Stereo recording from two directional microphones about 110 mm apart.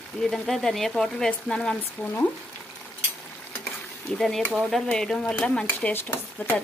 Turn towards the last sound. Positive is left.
turn(degrees=15)  # may be behind; listen again after turning